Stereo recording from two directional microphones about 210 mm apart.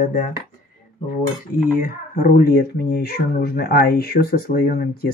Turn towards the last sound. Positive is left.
turn(degrees=45)  # may be behind; listen again after turning